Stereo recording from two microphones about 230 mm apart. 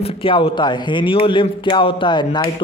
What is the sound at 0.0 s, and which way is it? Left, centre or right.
A man's voice, left.